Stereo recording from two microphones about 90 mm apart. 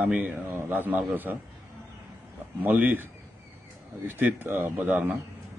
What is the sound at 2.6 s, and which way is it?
A man's voice, 15° right (ahead or behind).